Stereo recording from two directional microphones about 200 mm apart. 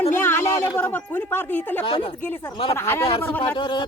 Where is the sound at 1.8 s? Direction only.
25° left (ahead or behind).